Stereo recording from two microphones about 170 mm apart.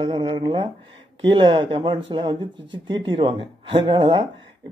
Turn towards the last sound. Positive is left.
turn(degrees=-30)  # may be behind; listen again after turning